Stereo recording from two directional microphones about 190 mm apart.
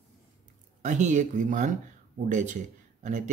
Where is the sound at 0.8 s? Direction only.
40° right (ahead or behind).